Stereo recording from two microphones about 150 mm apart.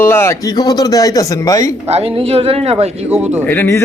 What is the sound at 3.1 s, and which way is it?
Speech, 15° right (ahead or behind).